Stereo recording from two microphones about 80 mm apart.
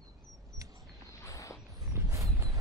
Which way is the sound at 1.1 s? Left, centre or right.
Left.